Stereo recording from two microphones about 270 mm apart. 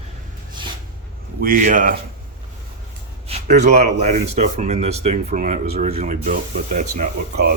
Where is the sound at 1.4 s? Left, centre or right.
Right.